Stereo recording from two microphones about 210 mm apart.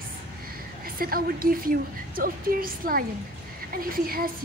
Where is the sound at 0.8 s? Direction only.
45° right (ahead or behind).